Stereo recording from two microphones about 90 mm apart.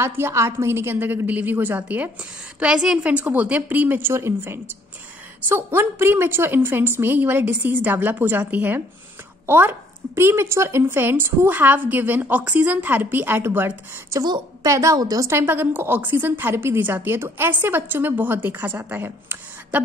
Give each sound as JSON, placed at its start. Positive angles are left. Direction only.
{"t": 0.0, "sound": "a woman's voice", "side_deg": -30}
{"t": 14.6, "sound": "a woman's voice", "side_deg": -35}